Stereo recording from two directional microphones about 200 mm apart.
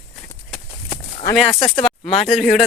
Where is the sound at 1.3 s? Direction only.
Centre (ahead or behind).